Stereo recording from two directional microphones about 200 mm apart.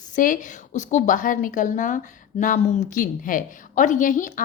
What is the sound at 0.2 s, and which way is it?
A woman's voice, 40° left (ahead or behind).